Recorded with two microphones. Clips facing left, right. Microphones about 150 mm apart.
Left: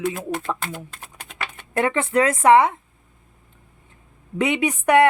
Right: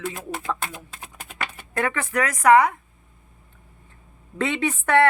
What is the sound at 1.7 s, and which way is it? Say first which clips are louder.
Speech: left 5 dB; 25° left (ahead or behind).